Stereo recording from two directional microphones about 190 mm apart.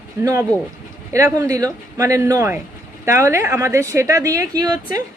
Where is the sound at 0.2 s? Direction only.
15° right (ahead or behind).